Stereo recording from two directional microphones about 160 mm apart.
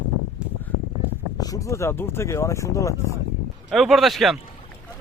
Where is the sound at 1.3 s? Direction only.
20° left (ahead or behind).